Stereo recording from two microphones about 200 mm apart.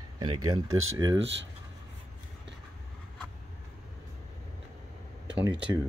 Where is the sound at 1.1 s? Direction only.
70° right (ahead or behind).